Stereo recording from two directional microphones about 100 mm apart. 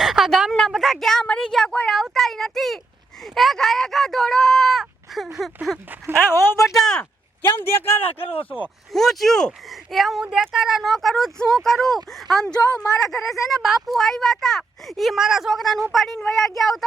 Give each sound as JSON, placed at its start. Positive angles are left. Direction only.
{"t": 0.0, "sound": "speech", "side_deg": 0}
{"t": 6.3, "sound": "speech", "side_deg": 25}
{"t": 6.7, "sound": "speech", "side_deg": 5}
{"t": 7.6, "sound": "speech", "side_deg": 25}
{"t": 7.9, "sound": "speech", "side_deg": 75}
{"t": 8.6, "sound": "speech", "side_deg": 5}